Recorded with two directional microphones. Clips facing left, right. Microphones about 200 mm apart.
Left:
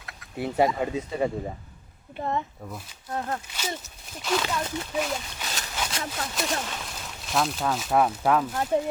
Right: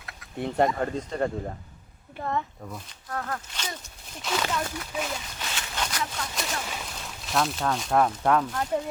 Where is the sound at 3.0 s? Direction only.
25° left (ahead or behind).